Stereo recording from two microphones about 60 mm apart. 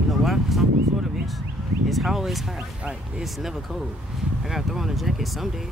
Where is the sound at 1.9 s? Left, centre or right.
Centre.